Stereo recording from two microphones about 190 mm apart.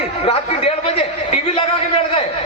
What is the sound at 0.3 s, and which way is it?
Speech, 30° left (ahead or behind).